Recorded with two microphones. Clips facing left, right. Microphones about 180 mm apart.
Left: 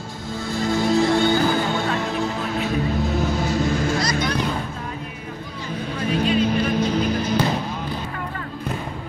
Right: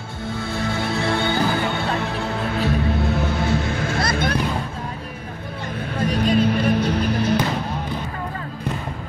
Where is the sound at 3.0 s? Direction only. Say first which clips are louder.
Even; 60° right (ahead or behind).